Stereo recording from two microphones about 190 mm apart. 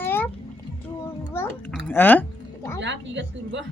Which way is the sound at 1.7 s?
10° left (ahead or behind).